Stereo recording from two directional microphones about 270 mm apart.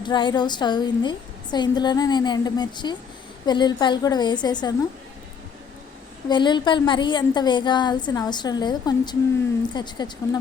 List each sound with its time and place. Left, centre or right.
0.0 s a woman's voice: centre
6.2 s a woman's voice: centre